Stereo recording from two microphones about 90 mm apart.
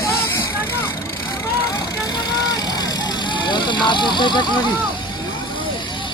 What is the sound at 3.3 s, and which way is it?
Vehicle, 60° left (ahead or behind).